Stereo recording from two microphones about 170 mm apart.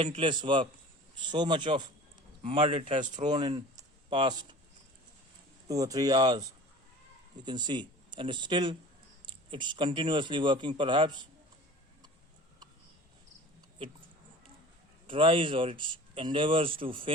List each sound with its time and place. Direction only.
0.0 s speech: 30° right (ahead or behind)
3.8 s a sound: 25° right (ahead or behind)
5.6 s a man's voice: 20° right (ahead or behind)
15.0 s speech: 30° right (ahead or behind)